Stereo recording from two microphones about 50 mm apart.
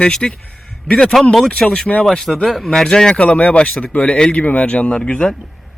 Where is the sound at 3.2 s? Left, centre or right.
Left.